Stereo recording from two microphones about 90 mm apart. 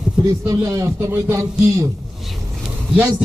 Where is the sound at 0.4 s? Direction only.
40° right (ahead or behind).